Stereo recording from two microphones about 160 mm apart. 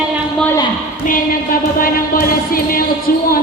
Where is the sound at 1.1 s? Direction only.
60° left (ahead or behind).